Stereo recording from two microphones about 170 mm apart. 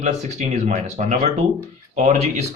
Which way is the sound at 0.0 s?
45° right (ahead or behind).